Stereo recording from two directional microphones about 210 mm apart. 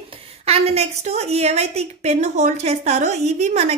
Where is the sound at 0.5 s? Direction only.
30° right (ahead or behind).